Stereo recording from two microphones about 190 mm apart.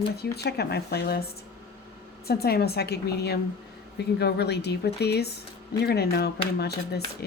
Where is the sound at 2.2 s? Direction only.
55° left (ahead or behind).